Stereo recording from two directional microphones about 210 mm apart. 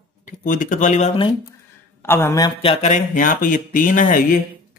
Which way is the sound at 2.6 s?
30° left (ahead or behind).